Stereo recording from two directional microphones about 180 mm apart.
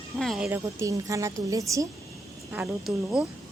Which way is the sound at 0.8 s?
20° right (ahead or behind).